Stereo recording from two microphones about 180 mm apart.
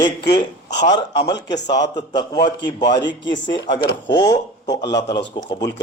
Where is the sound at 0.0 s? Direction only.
25° left (ahead or behind).